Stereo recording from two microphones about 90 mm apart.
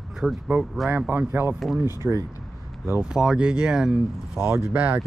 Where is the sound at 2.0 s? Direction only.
15° right (ahead or behind).